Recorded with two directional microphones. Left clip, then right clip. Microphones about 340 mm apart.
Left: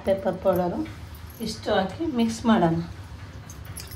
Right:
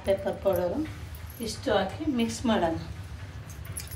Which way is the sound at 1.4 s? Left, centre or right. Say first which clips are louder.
Left 2 dB; left.